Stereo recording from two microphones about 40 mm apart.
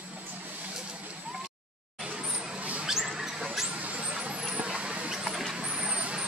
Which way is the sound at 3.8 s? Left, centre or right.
Right.